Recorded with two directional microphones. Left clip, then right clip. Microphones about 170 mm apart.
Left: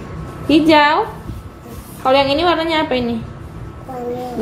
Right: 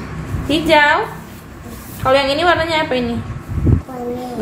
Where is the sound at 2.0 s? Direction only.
40° left (ahead or behind).